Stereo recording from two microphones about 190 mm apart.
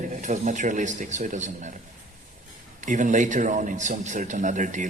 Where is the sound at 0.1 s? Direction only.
40° right (ahead or behind).